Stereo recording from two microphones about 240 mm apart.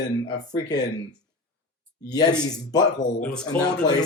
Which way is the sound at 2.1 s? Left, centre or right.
Centre.